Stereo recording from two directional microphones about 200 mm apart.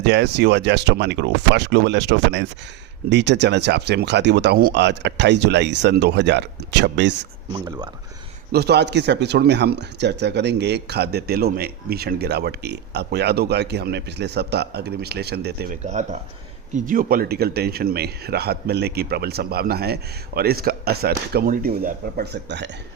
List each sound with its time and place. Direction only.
0.0 s speech: 60° right (ahead or behind)
7.5 s speech: 20° right (ahead or behind)
8.5 s speech: 55° right (ahead or behind)
15.8 s speech: 35° right (ahead or behind); by 22.7 s 60° right (ahead or behind)